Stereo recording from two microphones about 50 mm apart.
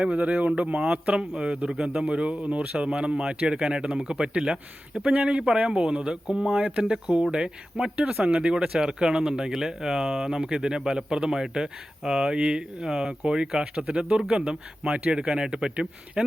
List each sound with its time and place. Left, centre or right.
0.0 s speech: right; by 2.0 s centre
2.0 s speech: right